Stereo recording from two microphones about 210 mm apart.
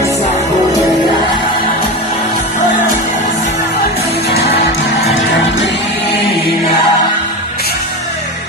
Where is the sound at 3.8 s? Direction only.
50° left (ahead or behind).